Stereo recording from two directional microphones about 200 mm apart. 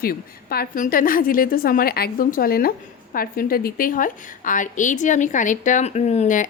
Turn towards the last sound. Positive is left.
turn(degrees=35)  # may be behind; listen again after turning